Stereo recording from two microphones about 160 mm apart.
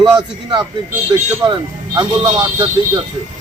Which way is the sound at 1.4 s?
25° right (ahead or behind).